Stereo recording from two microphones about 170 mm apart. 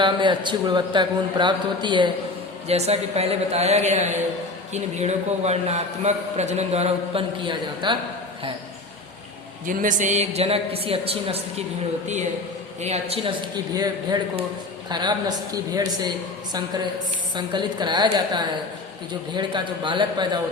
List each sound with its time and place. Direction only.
0.0 s a man's voice: 25° right (ahead or behind)
2.6 s a man's voice: 40° right (ahead or behind)
9.6 s a man's voice: 50° right (ahead or behind); by 11.6 s 35° right (ahead or behind)
12.8 s a man's voice: 40° right (ahead or behind)
13.7 s a man's voice: 20° right (ahead or behind)